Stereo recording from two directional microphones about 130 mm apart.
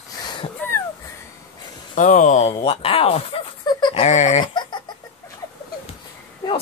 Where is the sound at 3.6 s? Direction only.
35° left (ahead or behind).